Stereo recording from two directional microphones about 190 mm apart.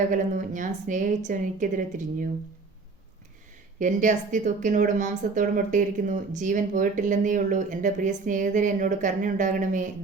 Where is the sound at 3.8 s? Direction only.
40° right (ahead or behind).